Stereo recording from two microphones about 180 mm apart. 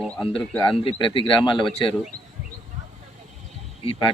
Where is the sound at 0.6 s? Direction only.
30° left (ahead or behind).